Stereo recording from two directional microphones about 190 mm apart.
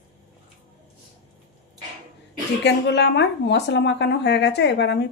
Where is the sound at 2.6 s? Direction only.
65° left (ahead or behind).